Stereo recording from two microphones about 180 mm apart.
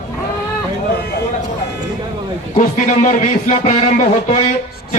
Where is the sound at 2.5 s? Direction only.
40° left (ahead or behind).